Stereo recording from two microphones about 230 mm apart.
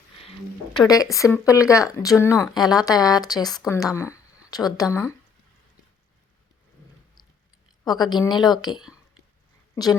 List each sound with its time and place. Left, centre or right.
1.1 s speech: centre
7.9 s speech: centre